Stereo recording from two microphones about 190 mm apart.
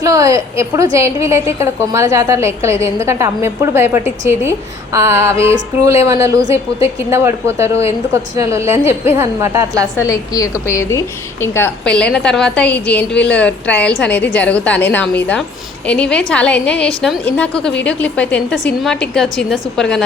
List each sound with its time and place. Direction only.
0.0 s a woman's voice: 15° right (ahead or behind)
10.0 s a woman's voice: 20° left (ahead or behind); by 20.1 s 5° left (ahead or behind)